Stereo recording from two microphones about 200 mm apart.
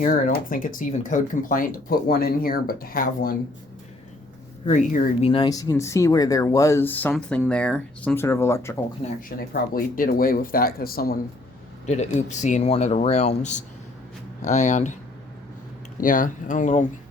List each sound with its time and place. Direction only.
0.0 s speech: 45° left (ahead or behind)
4.6 s speech: 40° left (ahead or behind)
5.3 s speech: 20° left (ahead or behind)
9.5 s speech: 45° left (ahead or behind)
11.9 s speech: 35° left (ahead or behind)
16.0 s speech: 40° left (ahead or behind)